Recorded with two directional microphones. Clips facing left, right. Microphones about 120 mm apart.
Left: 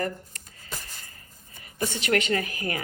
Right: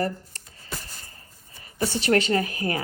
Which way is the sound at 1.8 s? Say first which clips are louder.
Right 4 dB; 35° right (ahead or behind).